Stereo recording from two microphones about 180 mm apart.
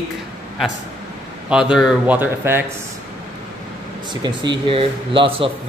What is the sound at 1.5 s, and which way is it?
Speech, 5° right (ahead or behind).